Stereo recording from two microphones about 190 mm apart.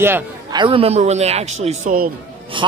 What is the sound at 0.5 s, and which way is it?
Speech, 25° right (ahead or behind).